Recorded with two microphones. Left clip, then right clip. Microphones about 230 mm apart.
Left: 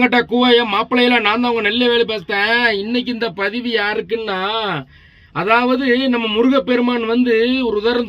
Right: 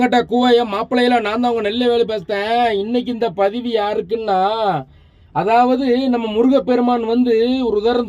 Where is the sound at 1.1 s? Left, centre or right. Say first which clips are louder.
Left 1 dB; centre.